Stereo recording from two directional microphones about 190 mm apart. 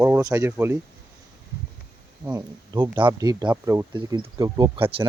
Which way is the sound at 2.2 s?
20° right (ahead or behind).